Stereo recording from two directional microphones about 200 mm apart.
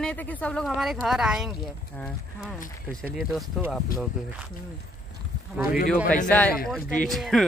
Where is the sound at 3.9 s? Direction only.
45° left (ahead or behind).